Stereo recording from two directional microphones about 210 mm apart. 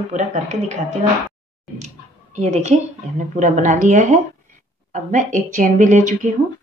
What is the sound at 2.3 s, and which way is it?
A woman's voice, 35° right (ahead or behind).